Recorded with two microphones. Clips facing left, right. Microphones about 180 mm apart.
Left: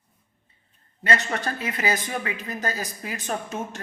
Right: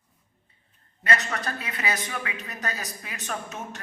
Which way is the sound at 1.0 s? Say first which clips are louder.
Left 3 dB; 30° left (ahead or behind).